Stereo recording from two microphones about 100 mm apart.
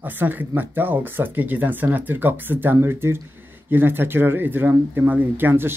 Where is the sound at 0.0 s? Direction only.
20° right (ahead or behind).